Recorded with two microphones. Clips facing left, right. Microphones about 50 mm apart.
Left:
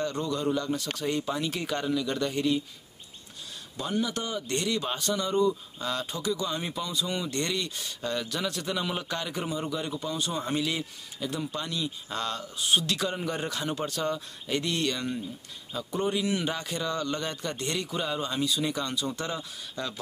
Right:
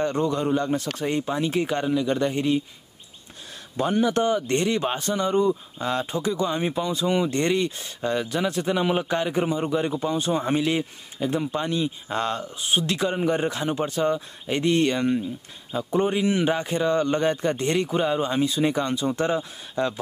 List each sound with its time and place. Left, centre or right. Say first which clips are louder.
0.0 s a man's voice: right 6 dB; right
3.7 s a man's voice: right 8 dB; right